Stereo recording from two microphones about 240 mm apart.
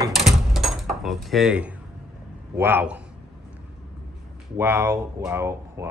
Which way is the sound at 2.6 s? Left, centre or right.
Centre.